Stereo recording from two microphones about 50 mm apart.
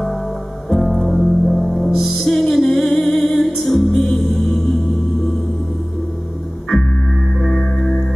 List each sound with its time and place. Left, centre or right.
0.7 s music: centre
6.7 s music: centre